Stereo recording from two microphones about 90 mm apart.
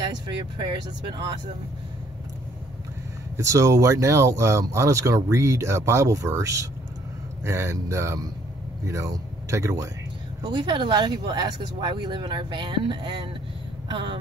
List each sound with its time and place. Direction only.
0.0 s speech: 60° right (ahead or behind)
3.3 s speech: 35° right (ahead or behind)
10.4 s speech: 60° right (ahead or behind)